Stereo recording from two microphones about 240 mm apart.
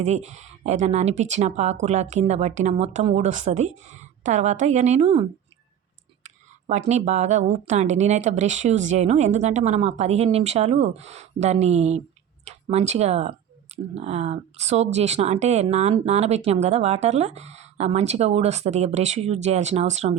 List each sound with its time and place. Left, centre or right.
0.0 s speech: right
6.7 s speech: right